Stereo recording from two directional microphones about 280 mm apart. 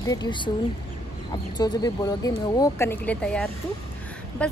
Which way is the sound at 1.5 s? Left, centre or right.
Centre.